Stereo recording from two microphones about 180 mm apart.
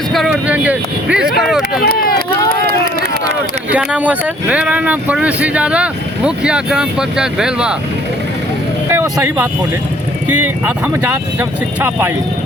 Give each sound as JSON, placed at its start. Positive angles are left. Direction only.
{"t": 0.1, "sound": "speech", "side_deg": 0}
{"t": 1.4, "sound": "run", "side_deg": 0}
{"t": 1.8, "sound": "run", "side_deg": 55}
{"t": 3.7, "sound": "speech", "side_deg": -5}
{"t": 8.9, "sound": "speech", "side_deg": -15}